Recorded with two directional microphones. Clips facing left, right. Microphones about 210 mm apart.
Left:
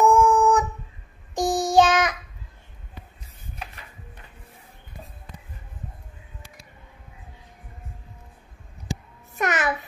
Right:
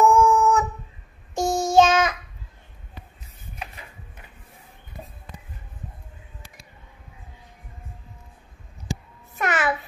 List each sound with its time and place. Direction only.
0.0 s dog: 15° left (ahead or behind)
1.3 s child singing: 15° left (ahead or behind)
9.4 s babbling: 40° left (ahead or behind)